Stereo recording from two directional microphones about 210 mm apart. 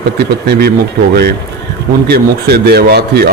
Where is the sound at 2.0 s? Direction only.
50° right (ahead or behind).